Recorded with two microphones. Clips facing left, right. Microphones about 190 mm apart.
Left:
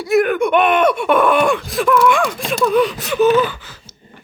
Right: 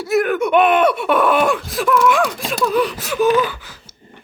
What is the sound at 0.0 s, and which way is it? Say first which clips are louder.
Speech: left 2 dB; centre (ahead or behind).